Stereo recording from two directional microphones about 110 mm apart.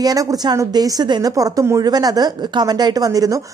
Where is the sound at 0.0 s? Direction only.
35° right (ahead or behind).